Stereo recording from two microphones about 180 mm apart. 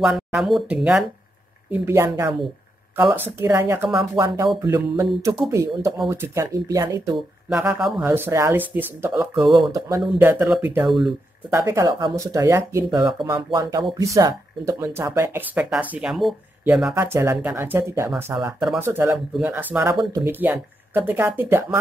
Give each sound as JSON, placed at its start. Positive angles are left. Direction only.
{"t": 0.3, "sound": "speech", "side_deg": 0}
{"t": 1.7, "sound": "speech", "side_deg": -15}
{"t": 7.4, "sound": "speech", "side_deg": -5}
{"t": 11.5, "sound": "speech", "side_deg": -15}